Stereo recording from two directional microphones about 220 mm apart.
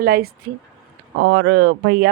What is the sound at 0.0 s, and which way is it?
A woman's voice, 45° right (ahead or behind).